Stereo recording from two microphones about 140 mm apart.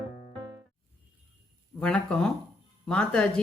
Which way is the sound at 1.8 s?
5° left (ahead or behind).